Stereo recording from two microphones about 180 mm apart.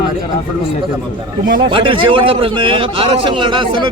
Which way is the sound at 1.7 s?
30° right (ahead or behind).